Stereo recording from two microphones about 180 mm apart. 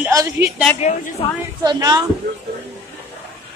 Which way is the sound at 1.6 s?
20° right (ahead or behind).